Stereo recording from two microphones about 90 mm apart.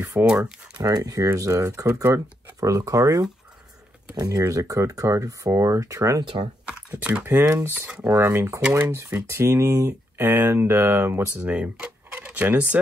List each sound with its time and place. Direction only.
0.2 s speech: 10° right (ahead or behind)
0.7 s speech: 45° right (ahead or behind)
6.9 s speech: 15° right (ahead or behind)
7.3 s speech: 30° right (ahead or behind)
8.0 s speech: 35° right (ahead or behind); by 12.8 s 15° right (ahead or behind)